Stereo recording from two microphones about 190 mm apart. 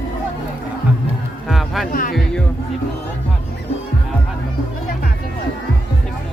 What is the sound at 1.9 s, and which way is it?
Music, 45° left (ahead or behind).